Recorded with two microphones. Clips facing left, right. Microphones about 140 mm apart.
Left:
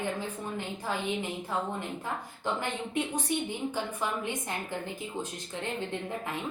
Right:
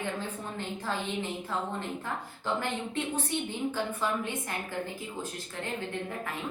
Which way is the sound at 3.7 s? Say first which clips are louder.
Right 2 dB; 20° left (ahead or behind).